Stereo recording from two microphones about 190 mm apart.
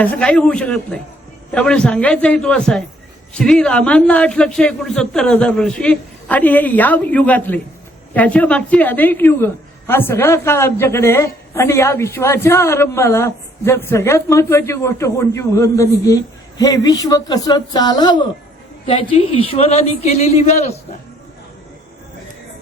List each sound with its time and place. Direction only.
0.0 s a woman's voice: 5° left (ahead or behind); by 20.7 s 35° left (ahead or behind)